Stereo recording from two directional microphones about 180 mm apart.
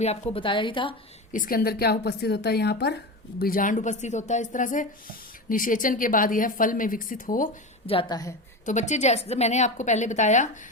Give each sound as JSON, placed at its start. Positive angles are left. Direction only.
{"t": 0.0, "sound": "a woman's voice", "side_deg": 35}
{"t": 1.3, "sound": "a woman's voice", "side_deg": 50}
{"t": 7.9, "sound": "a woman's voice", "side_deg": 25}
{"t": 8.6, "sound": "a woman's voice", "side_deg": 40}